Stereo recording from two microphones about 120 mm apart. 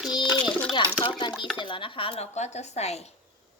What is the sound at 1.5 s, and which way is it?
Speech, 45° left (ahead or behind).